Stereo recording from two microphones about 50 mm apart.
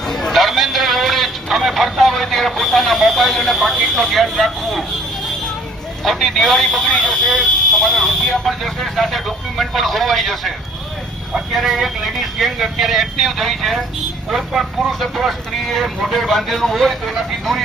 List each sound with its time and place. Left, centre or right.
0.1 s a sound: centre
6.1 s speech: centre
6.8 s speech: left
7.1 s speech: centre
11.5 s speech: centre